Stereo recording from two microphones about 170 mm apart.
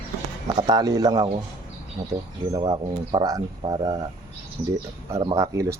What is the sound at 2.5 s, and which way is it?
Speech, 25° right (ahead or behind).